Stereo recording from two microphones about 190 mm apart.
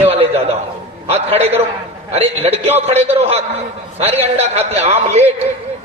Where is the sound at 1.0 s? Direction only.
35° right (ahead or behind).